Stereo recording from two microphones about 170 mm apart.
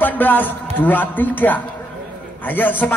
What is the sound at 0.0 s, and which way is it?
A man's voice, 10° left (ahead or behind).